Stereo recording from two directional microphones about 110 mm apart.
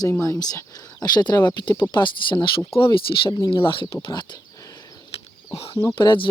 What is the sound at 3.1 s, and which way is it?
Speech, 35° left (ahead or behind).